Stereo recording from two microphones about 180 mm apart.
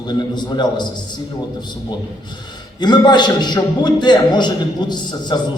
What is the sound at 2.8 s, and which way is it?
A man's voice, 25° left (ahead or behind).